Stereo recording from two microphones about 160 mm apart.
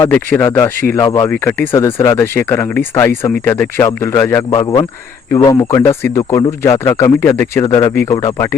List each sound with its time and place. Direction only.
0.0 s a man's voice: 10° left (ahead or behind)
4.6 s a man's voice: 25° left (ahead or behind)